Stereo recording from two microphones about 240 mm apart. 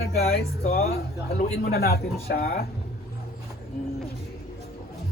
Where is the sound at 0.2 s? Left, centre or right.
Left.